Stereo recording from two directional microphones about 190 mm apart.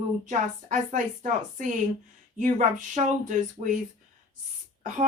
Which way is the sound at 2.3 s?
40° right (ahead or behind).